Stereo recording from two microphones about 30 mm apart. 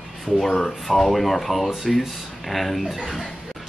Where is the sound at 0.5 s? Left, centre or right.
Centre.